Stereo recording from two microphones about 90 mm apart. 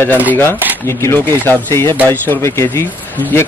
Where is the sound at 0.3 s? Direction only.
25° left (ahead or behind).